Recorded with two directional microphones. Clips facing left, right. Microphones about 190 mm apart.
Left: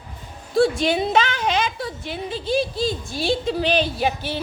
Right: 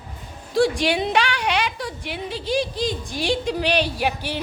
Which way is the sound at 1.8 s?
15° right (ahead or behind).